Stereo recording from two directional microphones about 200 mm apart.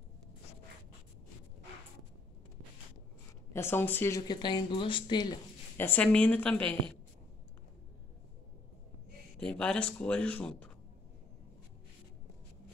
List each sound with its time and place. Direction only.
3.5 s speech: 10° left (ahead or behind)
5.8 s a woman's voice: 10° left (ahead or behind)
9.4 s speech: 5° left (ahead or behind)